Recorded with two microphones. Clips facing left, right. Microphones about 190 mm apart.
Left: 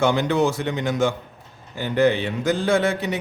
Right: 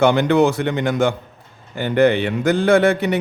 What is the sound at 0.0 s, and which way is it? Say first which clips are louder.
A man's voice: right 5 dB; 60° right (ahead or behind).